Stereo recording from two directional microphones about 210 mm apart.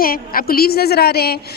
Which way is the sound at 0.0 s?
45° left (ahead or behind).